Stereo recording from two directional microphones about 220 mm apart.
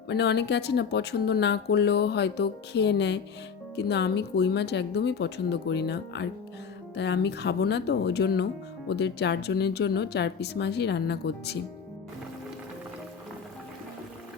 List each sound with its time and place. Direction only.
0.1 s speech: 50° left (ahead or behind)